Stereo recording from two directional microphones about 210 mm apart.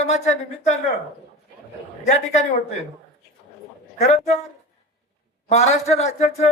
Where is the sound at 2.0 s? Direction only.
35° left (ahead or behind).